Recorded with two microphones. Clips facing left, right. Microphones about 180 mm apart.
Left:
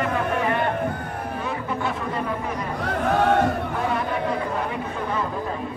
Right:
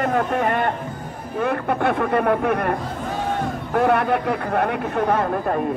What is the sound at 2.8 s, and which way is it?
Speech, 65° left (ahead or behind).